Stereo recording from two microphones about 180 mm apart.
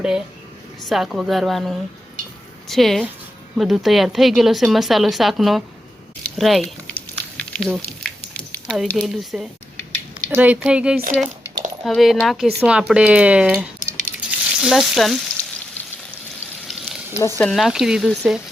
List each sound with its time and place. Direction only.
0.9 s speech: centre (ahead or behind)
6.2 s a sound: centre (ahead or behind)
8.3 s speech: centre (ahead or behind)
10.9 s speech: 50° right (ahead or behind)
11.9 s speech: centre (ahead or behind)
17.2 s speech: 15° left (ahead or behind)
17.5 s speech: centre (ahead or behind)